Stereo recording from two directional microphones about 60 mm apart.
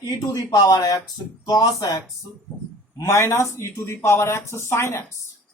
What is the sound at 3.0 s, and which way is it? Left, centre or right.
Speech, left.